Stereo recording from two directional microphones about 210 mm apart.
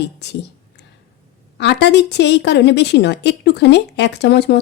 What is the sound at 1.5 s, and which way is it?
A woman's voice, 55° left (ahead or behind).